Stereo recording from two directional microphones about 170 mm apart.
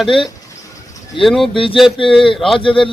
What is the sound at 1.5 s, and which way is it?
Speech, 30° left (ahead or behind).